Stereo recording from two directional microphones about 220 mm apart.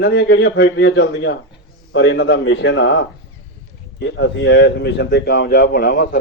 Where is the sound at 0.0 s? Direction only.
50° left (ahead or behind).